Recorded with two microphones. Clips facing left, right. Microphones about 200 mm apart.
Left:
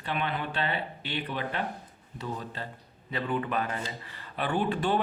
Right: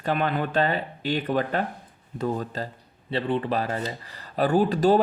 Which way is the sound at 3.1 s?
30° right (ahead or behind).